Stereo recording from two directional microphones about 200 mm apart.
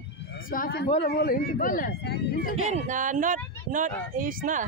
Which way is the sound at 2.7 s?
35° right (ahead or behind).